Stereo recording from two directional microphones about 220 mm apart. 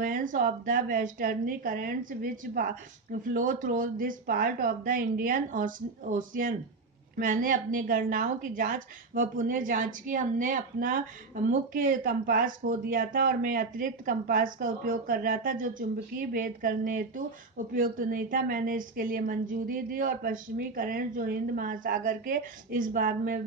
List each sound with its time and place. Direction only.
0.0 s a woman's voice: 40° right (ahead or behind)